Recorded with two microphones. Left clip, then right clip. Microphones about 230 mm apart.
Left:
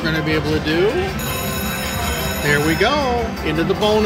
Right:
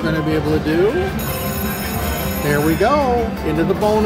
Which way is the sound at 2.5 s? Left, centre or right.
Centre.